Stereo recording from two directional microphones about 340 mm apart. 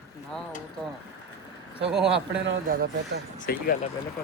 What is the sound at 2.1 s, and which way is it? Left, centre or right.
Speech, right.